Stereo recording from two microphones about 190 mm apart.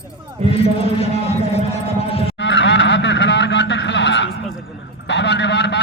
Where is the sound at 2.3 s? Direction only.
70° left (ahead or behind).